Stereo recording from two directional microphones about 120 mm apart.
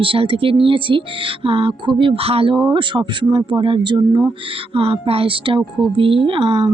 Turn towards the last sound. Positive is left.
turn(degrees=-50)  # may be behind; listen again after turning